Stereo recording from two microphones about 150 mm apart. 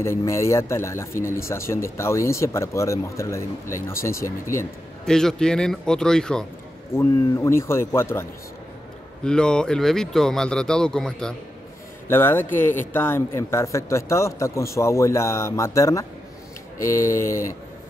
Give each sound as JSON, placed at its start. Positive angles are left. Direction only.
{"t": 0.0, "sound": "speech", "side_deg": 20}
{"t": 5.0, "sound": "speech", "side_deg": 5}
{"t": 6.9, "sound": "speech", "side_deg": 15}
{"t": 9.2, "sound": "speech", "side_deg": 5}
{"t": 12.1, "sound": "speech", "side_deg": 15}